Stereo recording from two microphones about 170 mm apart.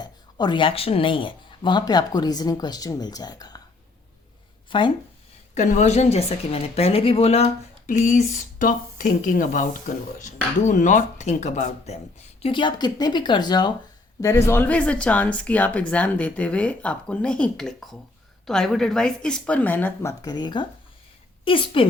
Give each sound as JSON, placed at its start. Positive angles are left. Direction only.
{"t": 0.0, "sound": "speech", "side_deg": 25}
{"t": 5.5, "sound": "a woman's voice", "side_deg": 45}